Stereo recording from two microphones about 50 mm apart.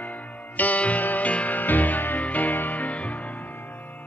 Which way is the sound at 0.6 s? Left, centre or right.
Left.